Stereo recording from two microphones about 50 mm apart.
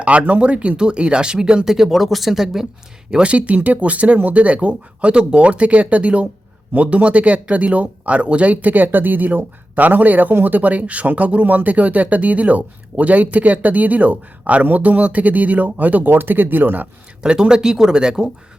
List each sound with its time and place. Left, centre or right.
0.0 s speech: right; by 2.6 s centre
3.1 s speech: right
17.2 s speech: centre